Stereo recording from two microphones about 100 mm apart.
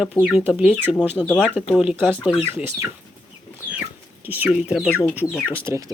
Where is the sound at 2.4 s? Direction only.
25° right (ahead or behind).